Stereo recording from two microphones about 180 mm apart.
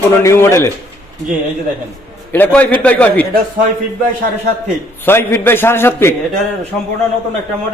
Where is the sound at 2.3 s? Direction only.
10° left (ahead or behind).